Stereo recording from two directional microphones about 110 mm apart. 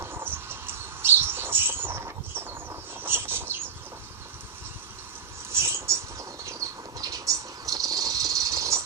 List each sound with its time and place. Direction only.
0.0 s bird flight: 20° right (ahead or behind)
3.0 s bird: 20° right (ahead or behind)
5.5 s a sound: 25° right (ahead or behind)